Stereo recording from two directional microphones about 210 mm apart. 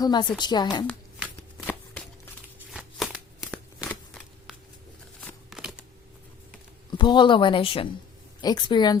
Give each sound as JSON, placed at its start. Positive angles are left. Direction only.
{"t": 0.0, "sound": "speech", "side_deg": 20}
{"t": 1.4, "sound": "shuffling cards", "side_deg": 5}
{"t": 2.7, "sound": "a sound", "side_deg": 0}
{"t": 5.5, "sound": "shuffling cards", "side_deg": -5}
{"t": 6.9, "sound": "speech", "side_deg": 20}